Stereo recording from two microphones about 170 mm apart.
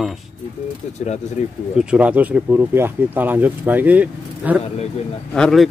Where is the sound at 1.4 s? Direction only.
45° left (ahead or behind).